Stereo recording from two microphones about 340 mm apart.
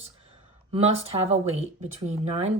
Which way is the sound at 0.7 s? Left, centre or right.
Centre.